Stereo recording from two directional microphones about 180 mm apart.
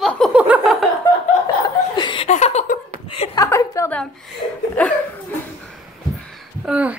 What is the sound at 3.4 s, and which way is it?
A woman's voice, 20° left (ahead or behind).